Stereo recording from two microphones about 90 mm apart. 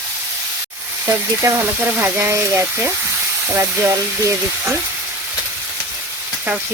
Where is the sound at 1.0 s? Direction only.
35° right (ahead or behind).